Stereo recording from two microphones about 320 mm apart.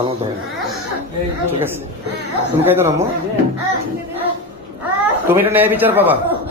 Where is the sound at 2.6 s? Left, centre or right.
Centre.